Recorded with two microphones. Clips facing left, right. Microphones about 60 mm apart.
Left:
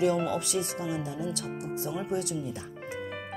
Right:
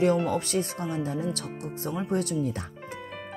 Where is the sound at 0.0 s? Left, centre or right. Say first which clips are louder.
Right 3 dB; right.